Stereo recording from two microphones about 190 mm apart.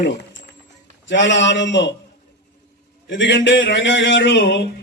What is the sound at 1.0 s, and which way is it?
Speech, 70° left (ahead or behind).